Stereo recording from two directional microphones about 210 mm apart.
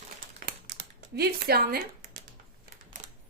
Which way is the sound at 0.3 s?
45° right (ahead or behind).